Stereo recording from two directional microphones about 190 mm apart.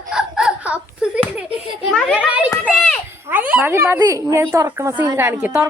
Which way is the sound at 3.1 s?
10° right (ahead or behind).